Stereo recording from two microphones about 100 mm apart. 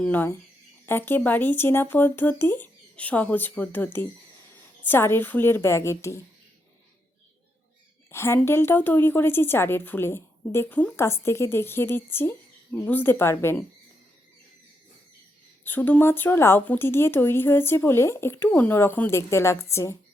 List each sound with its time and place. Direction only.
0.0 s a woman's voice: 20° left (ahead or behind)
4.9 s speech: 25° left (ahead or behind)
8.1 s speech: 25° left (ahead or behind)
15.6 s speech: 20° left (ahead or behind)